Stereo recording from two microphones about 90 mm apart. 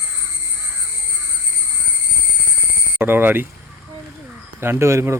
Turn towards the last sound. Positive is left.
turn(degrees=-30)  # may be behind; listen again after turning